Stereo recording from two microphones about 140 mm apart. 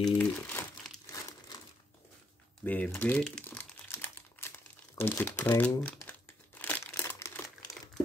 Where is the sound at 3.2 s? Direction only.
10° left (ahead or behind).